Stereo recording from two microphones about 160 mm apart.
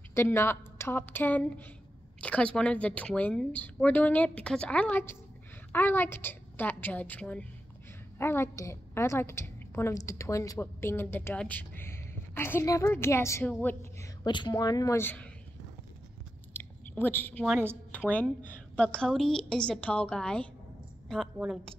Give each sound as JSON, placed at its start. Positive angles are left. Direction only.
{"t": 0.1, "sound": "a woman's voice", "side_deg": 15}
{"t": 14.2, "sound": "speech", "side_deg": 30}
{"t": 16.5, "sound": "chewing", "side_deg": 10}
{"t": 17.5, "sound": "speech", "side_deg": -15}
{"t": 17.9, "sound": "a woman's voice", "side_deg": 10}